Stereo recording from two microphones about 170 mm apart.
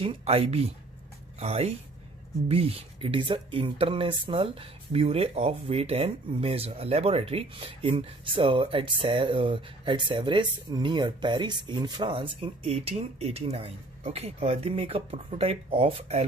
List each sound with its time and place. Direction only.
0.0 s speech: 35° right (ahead or behind)